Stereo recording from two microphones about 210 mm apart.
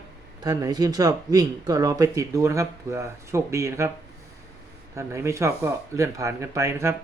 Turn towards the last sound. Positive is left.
turn(degrees=-15)  # may be behind; listen again after turning